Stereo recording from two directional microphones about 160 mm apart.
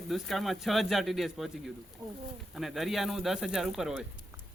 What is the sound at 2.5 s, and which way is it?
Speech, centre (ahead or behind).